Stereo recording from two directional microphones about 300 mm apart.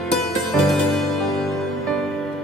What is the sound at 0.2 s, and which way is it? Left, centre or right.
Music, centre.